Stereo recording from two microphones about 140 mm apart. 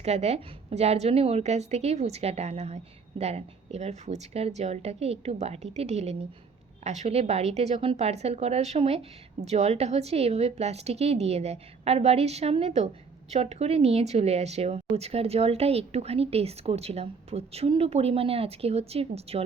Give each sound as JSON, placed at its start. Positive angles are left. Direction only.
{"t": 0.0, "sound": "a woman's voice", "side_deg": -50}